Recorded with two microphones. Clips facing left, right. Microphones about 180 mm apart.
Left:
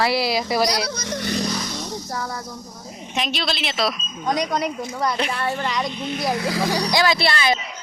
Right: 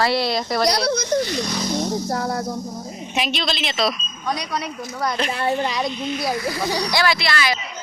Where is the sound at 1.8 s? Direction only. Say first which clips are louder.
Right 6 dB; 45° right (ahead or behind).